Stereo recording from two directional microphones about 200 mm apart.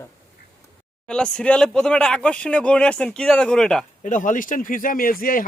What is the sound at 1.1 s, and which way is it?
Speech, 5° left (ahead or behind).